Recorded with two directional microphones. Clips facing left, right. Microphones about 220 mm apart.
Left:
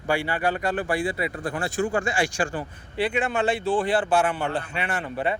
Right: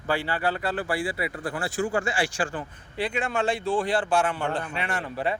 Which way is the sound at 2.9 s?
5° left (ahead or behind).